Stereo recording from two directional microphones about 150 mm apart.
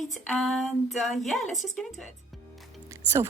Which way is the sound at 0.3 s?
5° left (ahead or behind).